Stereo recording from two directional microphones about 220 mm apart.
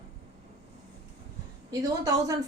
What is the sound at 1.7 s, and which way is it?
Speech, 15° right (ahead or behind).